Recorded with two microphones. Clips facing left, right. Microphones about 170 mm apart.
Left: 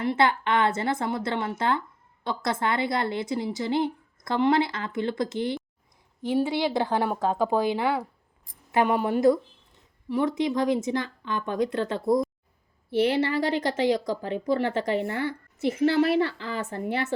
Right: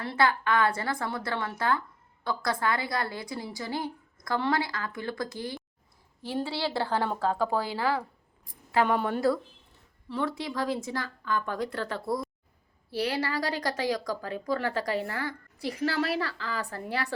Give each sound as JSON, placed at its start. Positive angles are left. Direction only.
{"t": 0.0, "sound": "speech", "side_deg": 20}